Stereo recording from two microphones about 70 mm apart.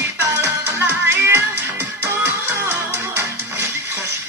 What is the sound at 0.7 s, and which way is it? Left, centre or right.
Music, right.